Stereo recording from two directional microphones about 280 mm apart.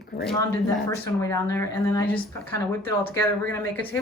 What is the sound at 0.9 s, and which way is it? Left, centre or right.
A woman's voice, centre.